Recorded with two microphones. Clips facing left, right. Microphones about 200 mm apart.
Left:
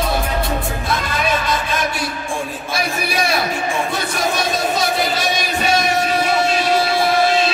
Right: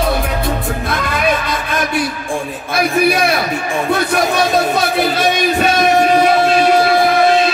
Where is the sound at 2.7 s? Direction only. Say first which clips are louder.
Right 11 dB; 55° right (ahead or behind).